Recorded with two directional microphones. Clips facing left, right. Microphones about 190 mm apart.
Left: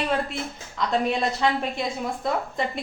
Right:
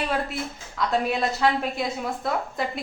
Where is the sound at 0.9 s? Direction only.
Centre (ahead or behind).